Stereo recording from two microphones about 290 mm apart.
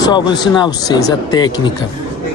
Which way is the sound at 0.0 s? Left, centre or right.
Centre.